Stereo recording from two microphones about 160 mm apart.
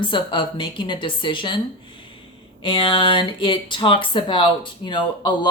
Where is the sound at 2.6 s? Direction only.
35° left (ahead or behind).